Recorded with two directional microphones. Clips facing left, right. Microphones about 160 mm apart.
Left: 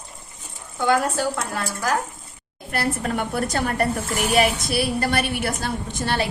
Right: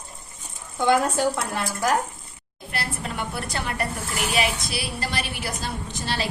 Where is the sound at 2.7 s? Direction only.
50° left (ahead or behind).